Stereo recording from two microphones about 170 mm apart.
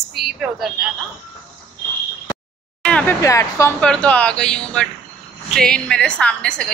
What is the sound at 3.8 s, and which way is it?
A woman's voice, 5° left (ahead or behind).